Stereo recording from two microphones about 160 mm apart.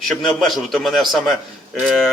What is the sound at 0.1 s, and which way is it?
A man's voice, centre (ahead or behind).